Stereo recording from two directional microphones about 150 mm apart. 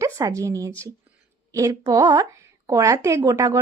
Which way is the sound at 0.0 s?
20° right (ahead or behind).